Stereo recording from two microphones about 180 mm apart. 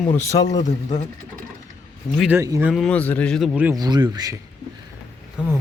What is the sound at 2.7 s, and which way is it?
Speech, centre (ahead or behind).